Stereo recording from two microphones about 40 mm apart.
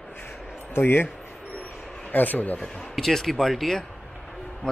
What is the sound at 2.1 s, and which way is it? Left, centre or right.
Speech, left.